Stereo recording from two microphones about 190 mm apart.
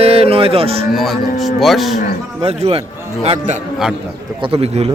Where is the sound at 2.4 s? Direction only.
35° right (ahead or behind).